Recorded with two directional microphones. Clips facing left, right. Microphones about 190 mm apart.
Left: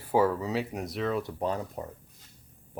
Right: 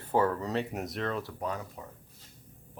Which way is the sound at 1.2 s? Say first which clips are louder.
Left 5 dB; 30° left (ahead or behind).